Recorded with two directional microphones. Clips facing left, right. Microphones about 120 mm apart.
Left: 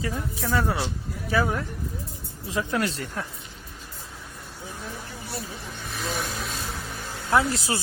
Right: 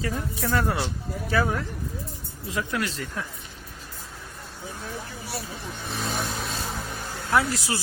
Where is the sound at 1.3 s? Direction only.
20° left (ahead or behind).